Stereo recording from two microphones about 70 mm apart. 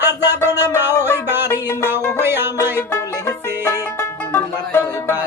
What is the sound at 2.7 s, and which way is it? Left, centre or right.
Music, left.